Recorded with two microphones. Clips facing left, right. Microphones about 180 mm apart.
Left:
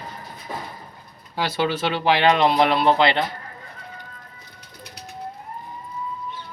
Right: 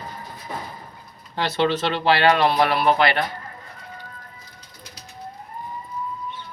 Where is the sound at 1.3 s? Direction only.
10° left (ahead or behind).